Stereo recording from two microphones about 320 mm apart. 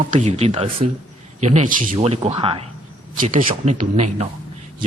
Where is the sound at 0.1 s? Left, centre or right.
Right.